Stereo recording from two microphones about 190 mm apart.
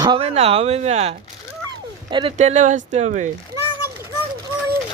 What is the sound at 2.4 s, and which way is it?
Speech, 40° right (ahead or behind).